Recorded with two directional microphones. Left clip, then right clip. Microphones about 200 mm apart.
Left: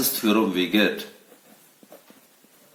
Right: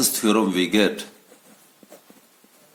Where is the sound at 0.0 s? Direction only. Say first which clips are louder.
Right 2 dB; 45° right (ahead or behind).